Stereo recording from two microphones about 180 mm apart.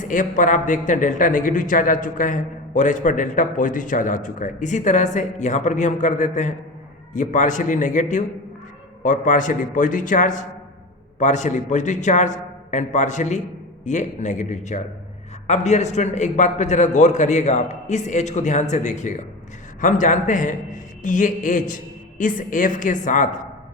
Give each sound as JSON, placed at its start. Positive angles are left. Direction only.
{"t": 0.0, "sound": "a man's voice", "side_deg": 45}